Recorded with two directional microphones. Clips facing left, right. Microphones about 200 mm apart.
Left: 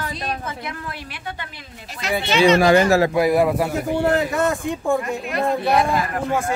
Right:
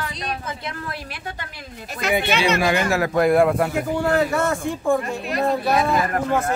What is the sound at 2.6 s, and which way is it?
Speech, 40° left (ahead or behind).